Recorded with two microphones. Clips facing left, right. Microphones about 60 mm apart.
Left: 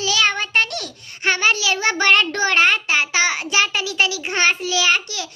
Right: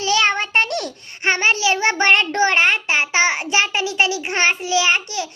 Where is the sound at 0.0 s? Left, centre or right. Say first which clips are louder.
Right 2 dB; right.